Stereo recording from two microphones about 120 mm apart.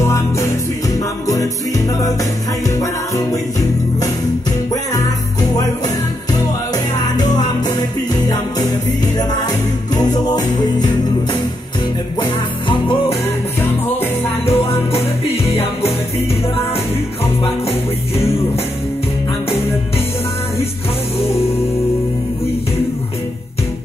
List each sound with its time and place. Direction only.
0.0 s music: 25° left (ahead or behind)
7.2 s music: 35° left (ahead or behind)
9.9 s music: 35° left (ahead or behind)
12.2 s music: 45° left (ahead or behind)
14.4 s music: 55° left (ahead or behind)
17.6 s music: 55° left (ahead or behind)